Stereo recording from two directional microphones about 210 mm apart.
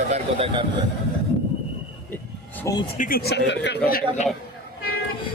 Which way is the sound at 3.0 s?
45° left (ahead or behind).